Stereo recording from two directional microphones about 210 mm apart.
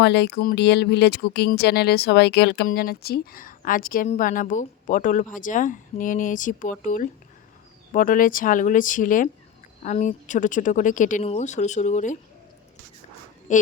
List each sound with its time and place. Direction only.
0.0 s a woman's voice: 55° left (ahead or behind); by 12.1 s 35° left (ahead or behind)
13.5 s a woman's voice: 35° left (ahead or behind)